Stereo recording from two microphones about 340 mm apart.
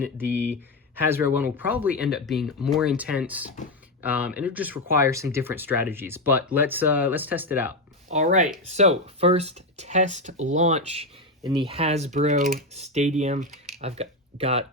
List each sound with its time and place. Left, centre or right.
0.9 s speech: centre
8.1 s speech: right